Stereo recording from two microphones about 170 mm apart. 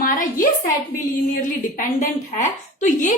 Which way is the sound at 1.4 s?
50° left (ahead or behind).